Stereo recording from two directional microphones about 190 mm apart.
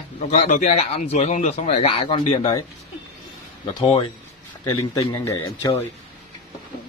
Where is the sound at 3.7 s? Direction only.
25° left (ahead or behind).